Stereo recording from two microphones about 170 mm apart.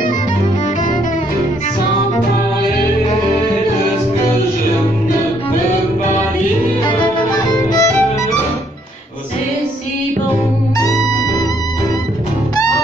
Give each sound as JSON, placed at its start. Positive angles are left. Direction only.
{"t": 6.8, "sound": "violin", "side_deg": 25}
{"t": 10.8, "sound": "music", "side_deg": 20}